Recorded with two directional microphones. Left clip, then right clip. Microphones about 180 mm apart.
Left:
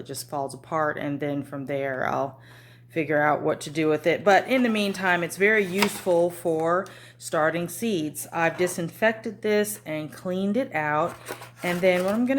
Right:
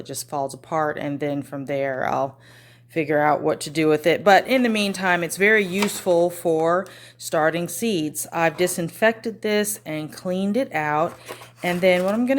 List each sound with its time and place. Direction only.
0.1 s a woman's voice: 30° right (ahead or behind)